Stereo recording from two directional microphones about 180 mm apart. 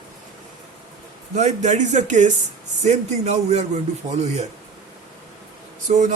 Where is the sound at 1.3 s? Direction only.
40° right (ahead or behind).